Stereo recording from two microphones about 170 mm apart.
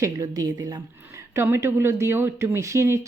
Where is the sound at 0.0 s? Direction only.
20° right (ahead or behind).